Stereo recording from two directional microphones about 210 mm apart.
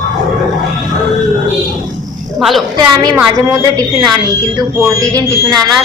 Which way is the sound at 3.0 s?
20° right (ahead or behind).